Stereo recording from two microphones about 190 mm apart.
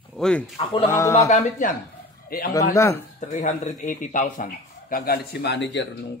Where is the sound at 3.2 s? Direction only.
40° left (ahead or behind).